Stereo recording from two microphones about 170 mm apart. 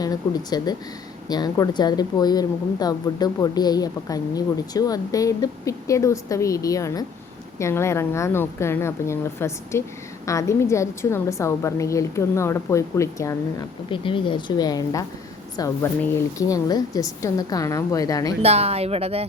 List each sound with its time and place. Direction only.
0.0 s a woman's voice: 25° left (ahead or behind)
13.9 s speech: 30° left (ahead or behind)
18.4 s speech: 35° right (ahead or behind)